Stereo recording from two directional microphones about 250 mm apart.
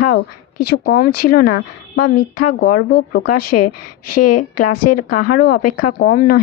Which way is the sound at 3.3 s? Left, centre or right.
Left.